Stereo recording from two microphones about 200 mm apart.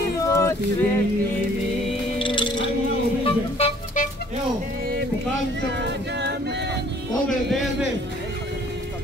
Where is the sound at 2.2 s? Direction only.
25° left (ahead or behind).